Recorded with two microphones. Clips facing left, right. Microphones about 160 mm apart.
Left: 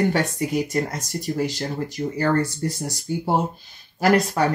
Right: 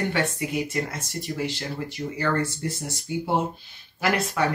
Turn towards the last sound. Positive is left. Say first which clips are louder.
# left 5 dB
turn(degrees=40)  # may be behind; listen again after turning